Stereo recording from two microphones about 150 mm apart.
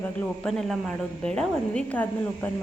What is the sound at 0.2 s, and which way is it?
A woman's voice, 5° left (ahead or behind).